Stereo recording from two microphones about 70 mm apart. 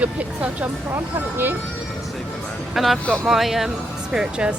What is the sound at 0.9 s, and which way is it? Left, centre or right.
Speech, right.